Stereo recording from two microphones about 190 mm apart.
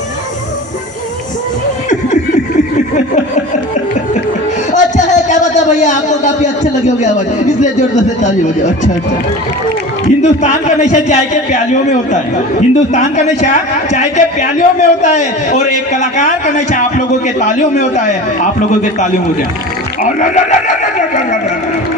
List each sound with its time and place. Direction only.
4.7 s a sound: 40° left (ahead or behind)
7.6 s a man's voice: 40° left (ahead or behind)
10.2 s a man's voice: 40° left (ahead or behind)
20.0 s neigh: 45° left (ahead or behind)